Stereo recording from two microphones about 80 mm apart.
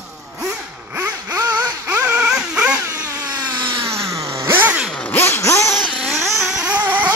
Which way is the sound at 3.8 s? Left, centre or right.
Right.